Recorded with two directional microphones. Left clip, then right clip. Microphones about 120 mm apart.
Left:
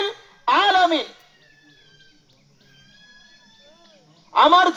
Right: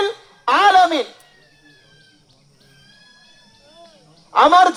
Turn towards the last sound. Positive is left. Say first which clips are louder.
# right 3 dB
turn(degrees=-70)  # may be behind; listen again after turning